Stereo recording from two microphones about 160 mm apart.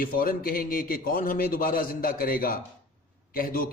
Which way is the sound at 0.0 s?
65° left (ahead or behind).